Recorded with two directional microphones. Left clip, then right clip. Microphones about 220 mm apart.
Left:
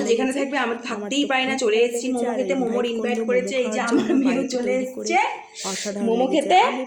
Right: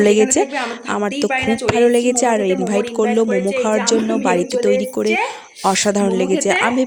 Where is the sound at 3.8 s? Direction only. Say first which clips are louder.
Right 4 dB; 40° right (ahead or behind).